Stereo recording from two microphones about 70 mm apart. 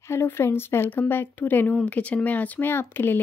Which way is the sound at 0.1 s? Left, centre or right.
Left.